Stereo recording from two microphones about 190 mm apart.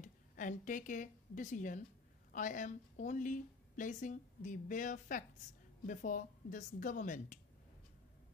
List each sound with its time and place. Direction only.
0.0 s a woman's voice: 45° left (ahead or behind)